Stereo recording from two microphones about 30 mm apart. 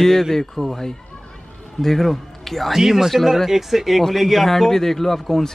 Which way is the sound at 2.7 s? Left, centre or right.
Centre.